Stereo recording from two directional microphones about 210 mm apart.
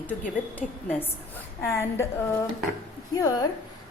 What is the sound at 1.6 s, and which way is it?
A woman's voice, 10° left (ahead or behind).